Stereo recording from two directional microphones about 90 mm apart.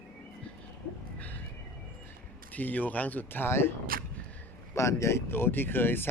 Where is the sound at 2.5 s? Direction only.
20° left (ahead or behind).